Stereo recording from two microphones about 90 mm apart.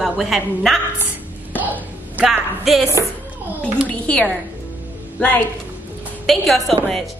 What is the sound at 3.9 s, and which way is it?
Speech, 10° left (ahead or behind).